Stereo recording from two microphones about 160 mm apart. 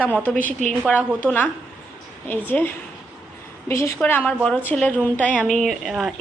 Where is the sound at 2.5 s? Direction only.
10° left (ahead or behind).